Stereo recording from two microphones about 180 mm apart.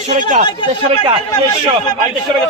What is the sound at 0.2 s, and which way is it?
Speech, 40° right (ahead or behind).